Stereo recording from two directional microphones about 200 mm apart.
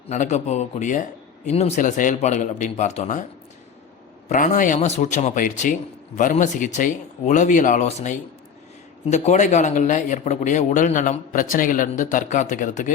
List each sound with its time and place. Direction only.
0.1 s a man's voice: 35° left (ahead or behind)
4.3 s a man's voice: 40° left (ahead or behind)